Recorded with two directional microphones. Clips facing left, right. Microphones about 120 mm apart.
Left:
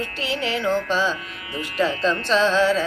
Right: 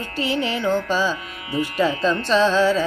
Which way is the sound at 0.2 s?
Centre (ahead or behind).